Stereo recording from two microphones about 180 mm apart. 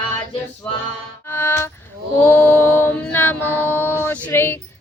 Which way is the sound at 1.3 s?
10° left (ahead or behind).